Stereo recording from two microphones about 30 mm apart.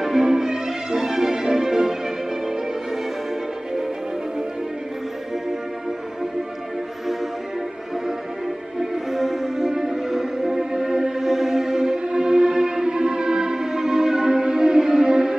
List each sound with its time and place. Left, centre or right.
0.0 s music: centre
8.7 s music: centre